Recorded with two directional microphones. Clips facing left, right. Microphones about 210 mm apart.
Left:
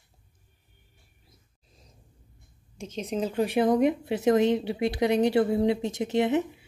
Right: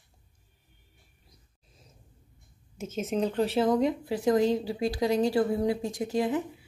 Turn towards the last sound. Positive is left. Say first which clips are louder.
# left 3 dB
turn(degrees=25)  # may be behind; listen again after turning